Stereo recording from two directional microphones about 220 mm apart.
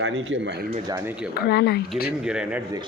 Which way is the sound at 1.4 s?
45° left (ahead or behind).